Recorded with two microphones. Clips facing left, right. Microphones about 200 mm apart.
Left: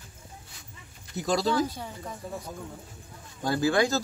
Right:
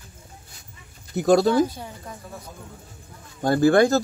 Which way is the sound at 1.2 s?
55° right (ahead or behind).